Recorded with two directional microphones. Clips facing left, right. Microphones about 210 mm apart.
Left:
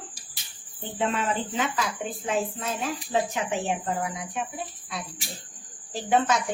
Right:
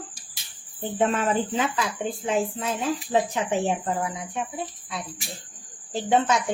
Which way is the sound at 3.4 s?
30° right (ahead or behind).